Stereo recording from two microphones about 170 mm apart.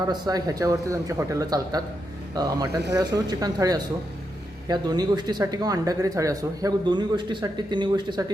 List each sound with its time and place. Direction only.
0.1 s speech: 25° right (ahead or behind)